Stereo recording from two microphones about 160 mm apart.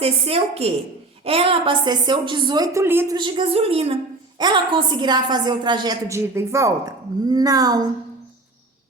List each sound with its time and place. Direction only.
0.0 s a woman's voice: 40° right (ahead or behind); by 3.2 s 15° right (ahead or behind)
3.2 s a woman's voice: 30° right (ahead or behind)